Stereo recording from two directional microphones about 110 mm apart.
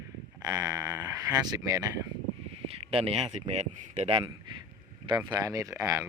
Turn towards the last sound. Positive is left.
turn(degrees=-30)  # may be behind; listen again after turning